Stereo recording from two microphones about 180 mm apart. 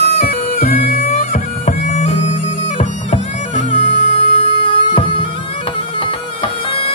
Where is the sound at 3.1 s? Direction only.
45° left (ahead or behind).